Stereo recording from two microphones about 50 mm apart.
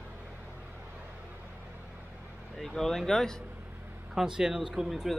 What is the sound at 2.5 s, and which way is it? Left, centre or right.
Speech, centre.